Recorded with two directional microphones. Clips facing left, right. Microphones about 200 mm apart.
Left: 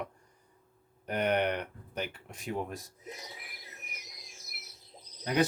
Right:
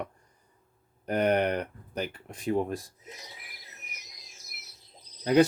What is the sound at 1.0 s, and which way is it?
Speech, 40° right (ahead or behind).